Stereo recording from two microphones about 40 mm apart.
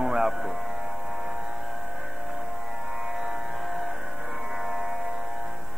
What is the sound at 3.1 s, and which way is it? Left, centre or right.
Music, centre.